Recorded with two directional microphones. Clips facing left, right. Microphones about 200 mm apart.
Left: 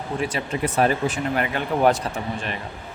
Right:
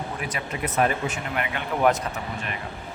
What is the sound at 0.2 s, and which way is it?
Speech, 30° left (ahead or behind).